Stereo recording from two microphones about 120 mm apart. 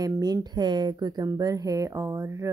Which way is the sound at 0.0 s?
35° right (ahead or behind).